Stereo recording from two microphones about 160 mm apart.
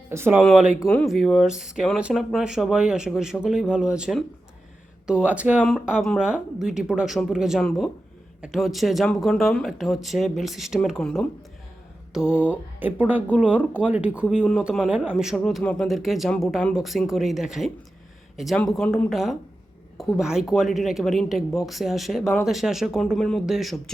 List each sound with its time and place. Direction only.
0.1 s speech: 15° right (ahead or behind)